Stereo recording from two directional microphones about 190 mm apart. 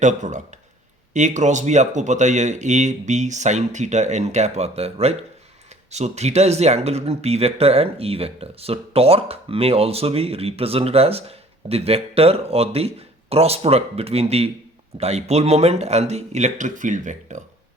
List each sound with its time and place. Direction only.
0.0 s speech: 40° right (ahead or behind)